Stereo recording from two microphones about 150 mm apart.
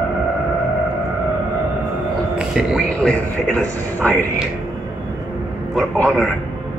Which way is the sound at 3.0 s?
5° left (ahead or behind).